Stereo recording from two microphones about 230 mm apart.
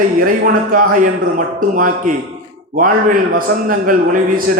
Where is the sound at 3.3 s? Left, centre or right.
Right.